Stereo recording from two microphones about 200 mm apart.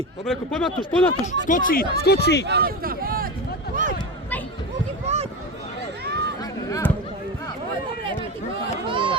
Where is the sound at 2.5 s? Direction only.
50° right (ahead or behind).